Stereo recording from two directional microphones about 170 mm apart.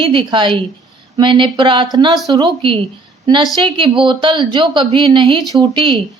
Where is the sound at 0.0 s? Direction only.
30° right (ahead or behind).